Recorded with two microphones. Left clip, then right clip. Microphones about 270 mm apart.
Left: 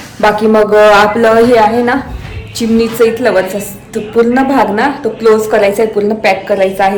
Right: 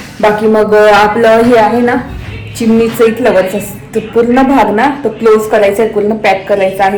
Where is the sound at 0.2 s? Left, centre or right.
Centre.